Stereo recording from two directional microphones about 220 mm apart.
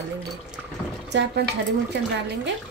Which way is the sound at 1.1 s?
50° right (ahead or behind).